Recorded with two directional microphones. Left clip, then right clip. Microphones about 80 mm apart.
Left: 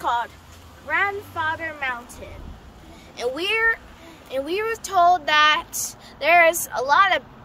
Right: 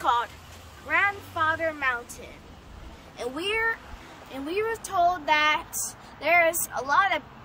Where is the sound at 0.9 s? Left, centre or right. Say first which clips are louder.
Left 2 dB; centre.